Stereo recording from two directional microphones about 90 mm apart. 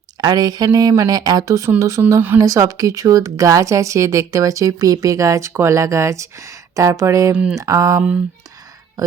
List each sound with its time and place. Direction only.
0.2 s speech: 50° right (ahead or behind)